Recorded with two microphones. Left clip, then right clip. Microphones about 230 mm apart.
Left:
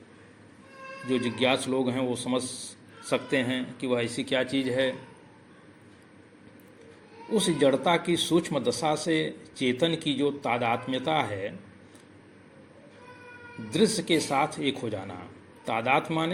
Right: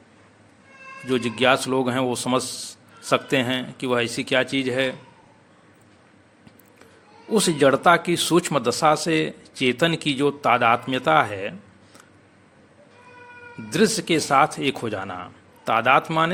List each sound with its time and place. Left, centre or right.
1.0 s speech: right
7.3 s speech: right
13.7 s speech: right